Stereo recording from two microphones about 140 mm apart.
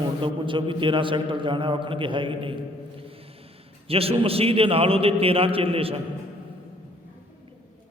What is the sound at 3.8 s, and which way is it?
A man's voice, 45° right (ahead or behind).